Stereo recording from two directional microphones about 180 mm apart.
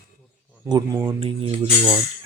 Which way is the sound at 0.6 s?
20° right (ahead or behind).